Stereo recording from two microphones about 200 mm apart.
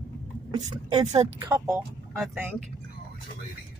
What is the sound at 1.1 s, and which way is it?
Speech, 20° right (ahead or behind).